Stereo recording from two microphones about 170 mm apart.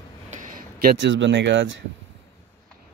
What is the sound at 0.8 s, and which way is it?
Speech, 90° right.